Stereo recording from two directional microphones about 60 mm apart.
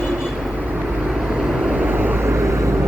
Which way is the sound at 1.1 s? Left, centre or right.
Centre.